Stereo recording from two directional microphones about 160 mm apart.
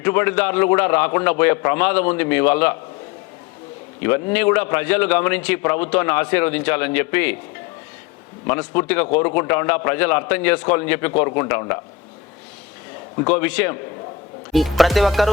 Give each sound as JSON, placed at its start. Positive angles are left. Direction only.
{"t": 0.0, "sound": "a man's voice", "side_deg": 15}
{"t": 4.0, "sound": "a man's voice", "side_deg": 10}
{"t": 8.4, "sound": "a man's voice", "side_deg": 15}
{"t": 13.2, "sound": "a man's voice", "side_deg": 10}
{"t": 14.5, "sound": "music", "side_deg": 0}